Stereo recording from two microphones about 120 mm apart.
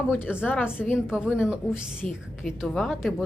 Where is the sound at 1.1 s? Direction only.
5° right (ahead or behind).